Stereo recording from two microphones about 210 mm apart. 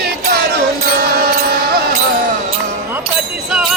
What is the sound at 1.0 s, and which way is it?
Mantra, 50° right (ahead or behind).